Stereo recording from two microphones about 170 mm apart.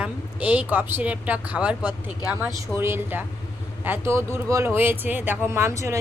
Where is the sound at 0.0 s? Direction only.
10° right (ahead or behind).